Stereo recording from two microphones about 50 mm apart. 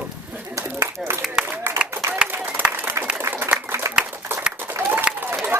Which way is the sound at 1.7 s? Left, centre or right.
Right.